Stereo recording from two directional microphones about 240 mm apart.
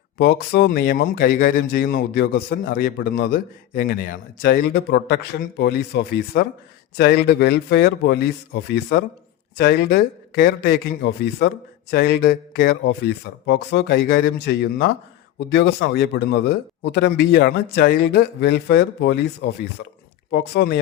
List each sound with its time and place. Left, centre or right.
0.2 s a man's voice: left